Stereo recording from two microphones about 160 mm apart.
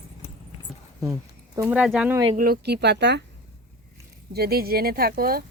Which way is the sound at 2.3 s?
75° right (ahead or behind).